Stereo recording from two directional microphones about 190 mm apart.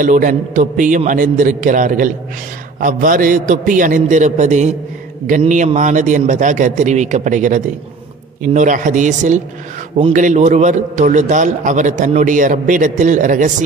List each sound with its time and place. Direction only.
0.0 s a man's voice: 45° right (ahead or behind)